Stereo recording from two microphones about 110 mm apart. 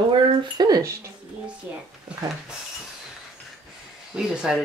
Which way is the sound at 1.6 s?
10° right (ahead or behind).